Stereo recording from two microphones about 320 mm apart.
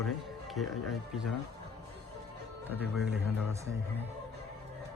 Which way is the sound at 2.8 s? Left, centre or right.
Centre.